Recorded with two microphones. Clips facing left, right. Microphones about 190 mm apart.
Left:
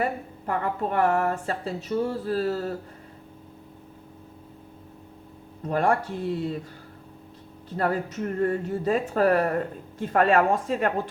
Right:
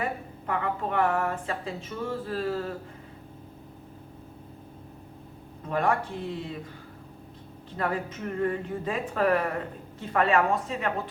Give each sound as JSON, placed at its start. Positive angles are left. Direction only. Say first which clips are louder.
{"t": 0.0, "sound": "a woman's voice", "louder": "left 4 dB", "side_deg": 45}
{"t": 5.6, "sound": "speech", "louder": "left 3 dB", "side_deg": 45}
{"t": 7.8, "sound": "a woman's voice", "louder": "left 4 dB", "side_deg": 40}